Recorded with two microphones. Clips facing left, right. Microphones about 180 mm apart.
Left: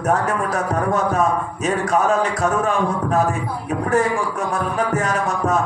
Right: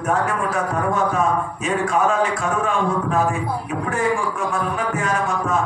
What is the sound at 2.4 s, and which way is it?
Speech, 40° left (ahead or behind).